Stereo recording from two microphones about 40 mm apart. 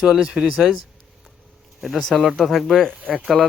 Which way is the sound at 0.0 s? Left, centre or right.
Centre.